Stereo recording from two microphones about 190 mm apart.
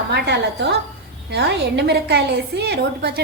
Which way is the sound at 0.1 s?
60° right (ahead or behind).